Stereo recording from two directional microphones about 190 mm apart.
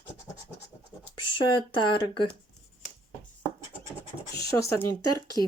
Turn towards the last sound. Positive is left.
turn(degrees=20)  # may be behind; listen again after turning